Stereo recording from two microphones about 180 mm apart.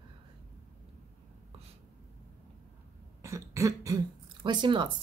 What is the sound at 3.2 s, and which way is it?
Throat clearing, 15° right (ahead or behind).